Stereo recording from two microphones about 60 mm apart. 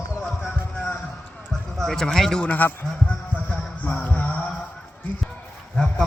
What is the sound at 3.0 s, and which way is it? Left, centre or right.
Music, left.